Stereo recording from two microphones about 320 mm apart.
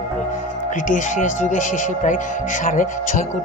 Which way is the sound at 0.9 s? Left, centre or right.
Left.